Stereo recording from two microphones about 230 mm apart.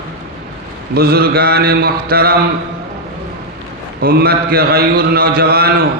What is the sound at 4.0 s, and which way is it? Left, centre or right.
A man's voice, right.